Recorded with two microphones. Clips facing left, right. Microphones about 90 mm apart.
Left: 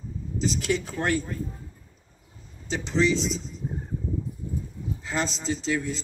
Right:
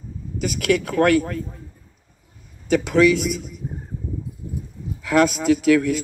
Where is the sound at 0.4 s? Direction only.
65° right (ahead or behind).